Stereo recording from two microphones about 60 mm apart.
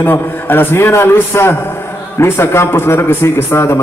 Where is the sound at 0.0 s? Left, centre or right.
Left.